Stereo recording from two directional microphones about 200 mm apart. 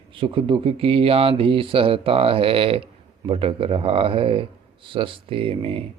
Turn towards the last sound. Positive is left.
turn(degrees=-25)  # may be behind; listen again after turning